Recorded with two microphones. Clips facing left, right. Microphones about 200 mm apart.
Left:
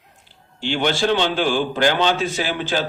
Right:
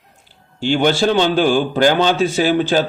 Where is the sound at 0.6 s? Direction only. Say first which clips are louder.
Right 5 dB; 45° right (ahead or behind).